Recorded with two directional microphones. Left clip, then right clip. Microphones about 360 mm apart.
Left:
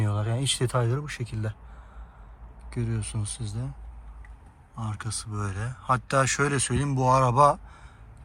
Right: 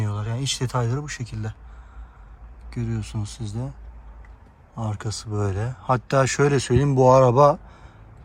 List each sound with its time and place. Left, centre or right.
0.0 s speech: centre
2.6 s speech: centre
4.7 s speech: centre